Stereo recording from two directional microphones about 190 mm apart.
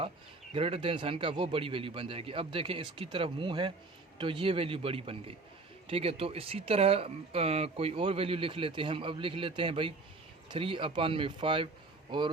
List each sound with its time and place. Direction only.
0.5 s speech: 30° right (ahead or behind)